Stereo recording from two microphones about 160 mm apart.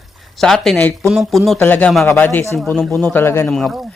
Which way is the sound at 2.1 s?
15° left (ahead or behind).